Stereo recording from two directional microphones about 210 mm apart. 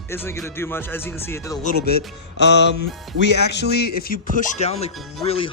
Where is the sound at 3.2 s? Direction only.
55° left (ahead or behind).